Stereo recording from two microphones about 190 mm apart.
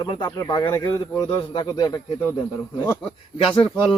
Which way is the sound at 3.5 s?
25° left (ahead or behind).